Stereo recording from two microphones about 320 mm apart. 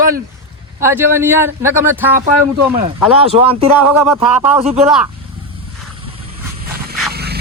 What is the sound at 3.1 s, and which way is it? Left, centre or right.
Speech, centre.